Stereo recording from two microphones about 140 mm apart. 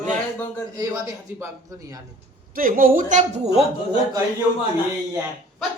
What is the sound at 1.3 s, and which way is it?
Speech, 25° right (ahead or behind).